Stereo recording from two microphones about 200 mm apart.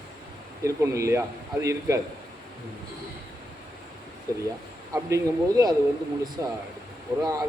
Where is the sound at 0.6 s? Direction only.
15° right (ahead or behind).